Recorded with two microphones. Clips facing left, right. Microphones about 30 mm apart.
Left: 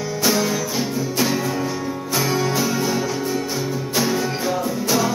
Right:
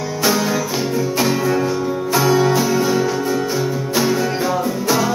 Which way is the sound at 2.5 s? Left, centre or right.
Centre.